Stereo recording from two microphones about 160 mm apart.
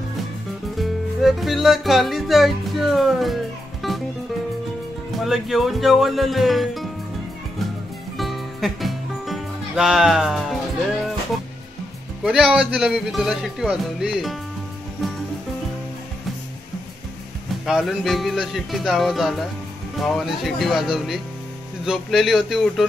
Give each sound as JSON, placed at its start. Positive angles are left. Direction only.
{"t": 0.7, "sound": "music", "side_deg": 0}
{"t": 5.1, "sound": "speech", "side_deg": 0}
{"t": 8.2, "sound": "music", "side_deg": 0}
{"t": 12.2, "sound": "speech", "side_deg": -5}
{"t": 17.6, "sound": "speech", "side_deg": 0}